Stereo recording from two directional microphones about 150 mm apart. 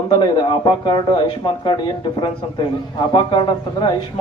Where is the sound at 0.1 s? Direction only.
30° left (ahead or behind).